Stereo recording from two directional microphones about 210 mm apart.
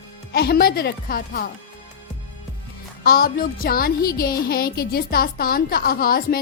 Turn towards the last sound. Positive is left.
turn(degrees=45)  # may be behind; listen again after turning